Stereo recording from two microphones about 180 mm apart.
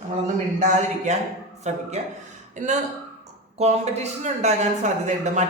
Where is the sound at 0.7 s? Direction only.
40° right (ahead or behind).